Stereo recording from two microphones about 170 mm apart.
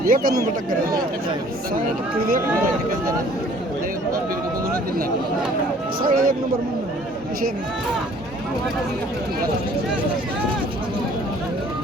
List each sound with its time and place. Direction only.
0.0 s a man's voice: 55° right (ahead or behind)
6.0 s a man's voice: 55° right (ahead or behind)